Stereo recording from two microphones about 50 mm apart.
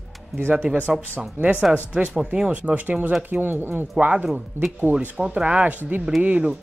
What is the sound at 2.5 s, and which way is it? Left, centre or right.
Speech, right.